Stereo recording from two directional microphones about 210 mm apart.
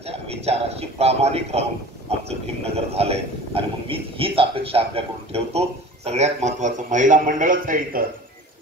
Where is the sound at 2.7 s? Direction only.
30° right (ahead or behind).